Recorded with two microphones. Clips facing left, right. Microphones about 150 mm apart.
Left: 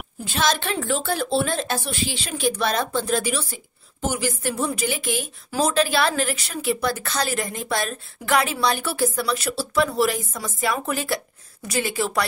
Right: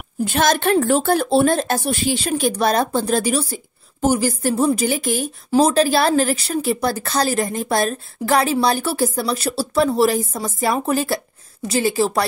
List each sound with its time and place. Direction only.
0.2 s a woman's voice: 50° right (ahead or behind); by 12.3 s 30° right (ahead or behind)